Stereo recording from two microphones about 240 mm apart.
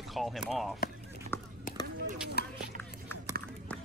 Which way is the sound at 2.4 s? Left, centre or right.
Left.